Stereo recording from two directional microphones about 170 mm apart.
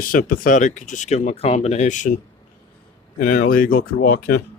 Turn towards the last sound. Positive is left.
turn(degrees=60)  # may be behind; listen again after turning